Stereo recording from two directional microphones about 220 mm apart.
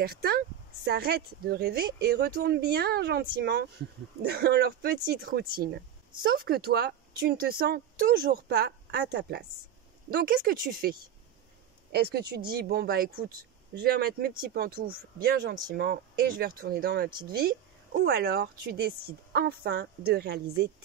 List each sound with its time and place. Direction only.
0.0 s speech: 45° right (ahead or behind)